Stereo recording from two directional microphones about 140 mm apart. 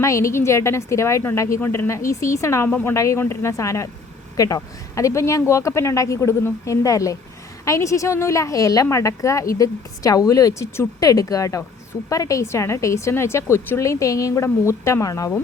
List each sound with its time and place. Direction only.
0.0 s a woman's voice: 20° left (ahead or behind)
2.6 s a woman's voice: 10° left (ahead or behind)
2.9 s a woman's voice: 20° left (ahead or behind)